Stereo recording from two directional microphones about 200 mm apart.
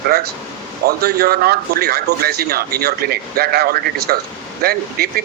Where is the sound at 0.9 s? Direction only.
50° right (ahead or behind).